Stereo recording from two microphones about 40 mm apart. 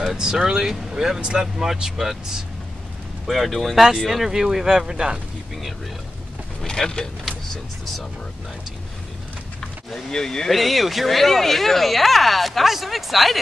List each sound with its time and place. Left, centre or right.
0.2 s speech: centre
3.3 s speech: centre
6.6 s speech: centre
9.8 s speech: centre
10.5 s speech: centre